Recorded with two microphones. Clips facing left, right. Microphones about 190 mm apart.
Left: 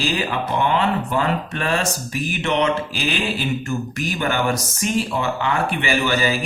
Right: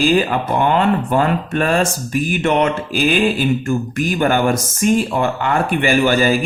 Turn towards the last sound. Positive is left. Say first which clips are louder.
# right 6 dB
turn(degrees=-50)  # may be behind; listen again after turning